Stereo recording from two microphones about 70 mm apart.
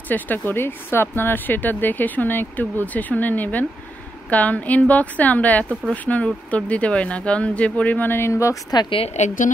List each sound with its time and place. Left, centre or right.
0.1 s speech: left
8.1 s speech: left